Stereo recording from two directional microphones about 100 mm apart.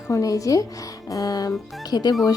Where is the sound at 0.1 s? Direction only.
35° left (ahead or behind).